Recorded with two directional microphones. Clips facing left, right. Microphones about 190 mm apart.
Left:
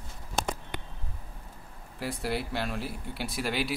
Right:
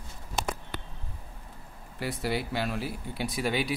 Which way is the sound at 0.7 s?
15° left (ahead or behind).